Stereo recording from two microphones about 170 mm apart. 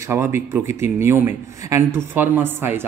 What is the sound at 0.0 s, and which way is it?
Speech, 15° right (ahead or behind).